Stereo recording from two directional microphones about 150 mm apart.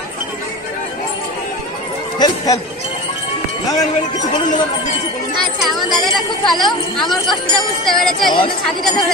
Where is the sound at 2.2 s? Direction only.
30° left (ahead or behind).